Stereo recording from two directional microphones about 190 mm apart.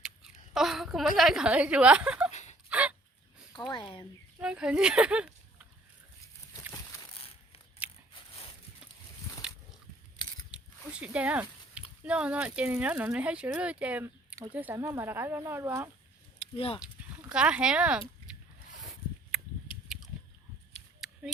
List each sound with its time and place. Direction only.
0.0 s speech: 5° right (ahead or behind)
2.3 s a sound: 35° left (ahead or behind)
2.6 s a sound: 5° right (ahead or behind)
3.5 s speech: 25° left (ahead or behind)
4.4 s speech: 5° right (ahead or behind)
7.8 s biting: 10° right (ahead or behind)
9.4 s a sound: 5° right (ahead or behind)
10.5 s biting: 5° right (ahead or behind)
12.0 s speech: 5° right (ahead or behind)
16.4 s speech: 30° left (ahead or behind)
16.8 s speech: 5° right (ahead or behind)
21.0 s cap gun: centre (ahead or behind)